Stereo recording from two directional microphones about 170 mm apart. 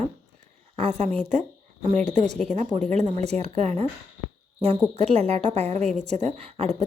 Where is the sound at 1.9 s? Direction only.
45° right (ahead or behind).